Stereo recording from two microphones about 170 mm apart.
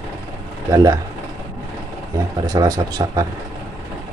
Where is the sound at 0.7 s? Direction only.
20° right (ahead or behind).